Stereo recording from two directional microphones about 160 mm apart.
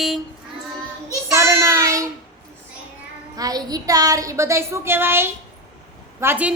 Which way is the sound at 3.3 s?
25° right (ahead or behind).